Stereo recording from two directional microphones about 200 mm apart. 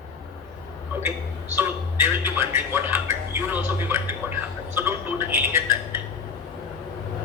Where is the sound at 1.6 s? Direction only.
10° right (ahead or behind).